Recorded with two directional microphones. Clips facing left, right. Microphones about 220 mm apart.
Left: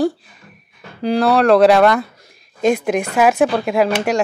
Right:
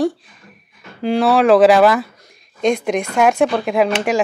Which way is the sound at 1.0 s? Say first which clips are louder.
Even; centre (ahead or behind).